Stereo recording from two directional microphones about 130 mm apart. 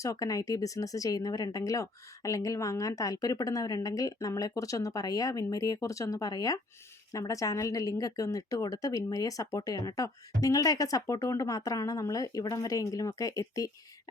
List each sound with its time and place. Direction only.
0.0 s speech: 25° left (ahead or behind)